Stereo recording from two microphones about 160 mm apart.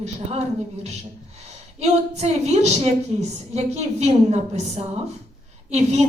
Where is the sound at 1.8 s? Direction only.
45° right (ahead or behind).